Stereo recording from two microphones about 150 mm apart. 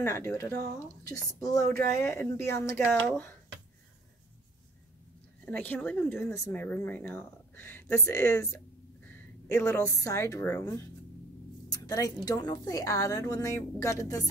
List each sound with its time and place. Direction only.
0.0 s a woman's voice: 15° left (ahead or behind)
5.4 s speech: 10° left (ahead or behind)
11.7 s a sound: 25° left (ahead or behind)
12.3 s a woman's voice: 25° left (ahead or behind)